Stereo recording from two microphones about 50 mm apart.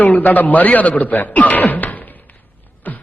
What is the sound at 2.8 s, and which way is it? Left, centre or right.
Beatboxing, left.